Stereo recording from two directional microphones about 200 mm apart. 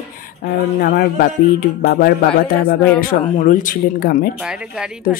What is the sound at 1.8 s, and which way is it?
Speech, 50° left (ahead or behind).